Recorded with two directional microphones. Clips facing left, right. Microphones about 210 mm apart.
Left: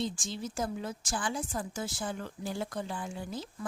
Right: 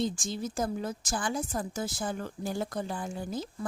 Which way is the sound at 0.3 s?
40° right (ahead or behind).